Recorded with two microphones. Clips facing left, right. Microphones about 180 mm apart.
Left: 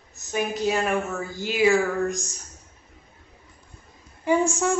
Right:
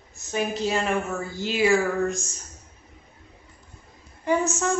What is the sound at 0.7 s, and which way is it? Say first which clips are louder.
Speech: left 1 dB; centre (ahead or behind).